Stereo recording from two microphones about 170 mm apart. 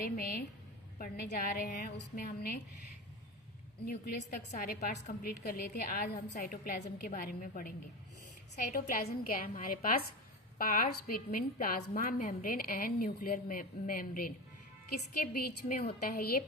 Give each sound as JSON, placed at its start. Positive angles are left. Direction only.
{"t": 0.0, "sound": "speech", "side_deg": 60}
{"t": 3.8, "sound": "a woman's voice", "side_deg": 60}
{"t": 8.7, "sound": "speech", "side_deg": 60}